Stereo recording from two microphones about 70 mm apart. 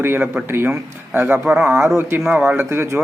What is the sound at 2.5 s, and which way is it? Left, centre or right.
Speech, right.